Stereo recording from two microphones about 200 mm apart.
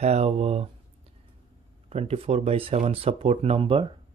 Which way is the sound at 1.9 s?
30° right (ahead or behind).